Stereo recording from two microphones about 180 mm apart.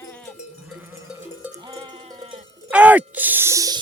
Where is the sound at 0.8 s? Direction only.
10° right (ahead or behind).